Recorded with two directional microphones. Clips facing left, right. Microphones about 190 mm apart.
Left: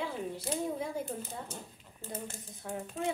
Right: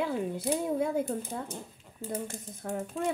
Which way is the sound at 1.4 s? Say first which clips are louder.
Right 4 dB; 10° right (ahead or behind).